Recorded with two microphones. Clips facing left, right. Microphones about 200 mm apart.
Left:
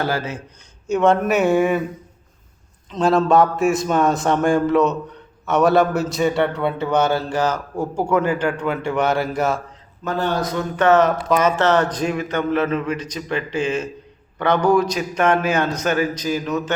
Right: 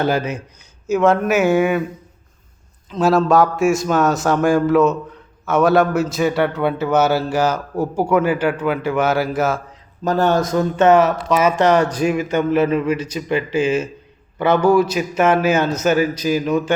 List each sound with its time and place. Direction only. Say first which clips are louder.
0.0 s a man's voice: right 4 dB; 20° right (ahead or behind)
0.9 s a man's voice: right 1 dB; centre (ahead or behind)
2.9 s a man's voice: right 1 dB; 5° right (ahead or behind)
10.0 s speech: right 5 dB; 40° right (ahead or behind)
10.8 s speech: right 2 dB; 20° right (ahead or behind)
11.0 s a man's voice: right 1 dB; 5° right (ahead or behind)